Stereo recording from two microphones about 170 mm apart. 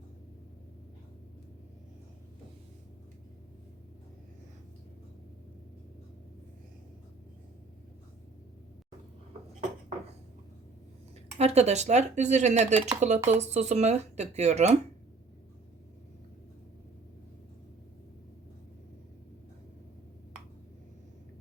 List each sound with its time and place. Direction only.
11.3 s speech: 40° right (ahead or behind)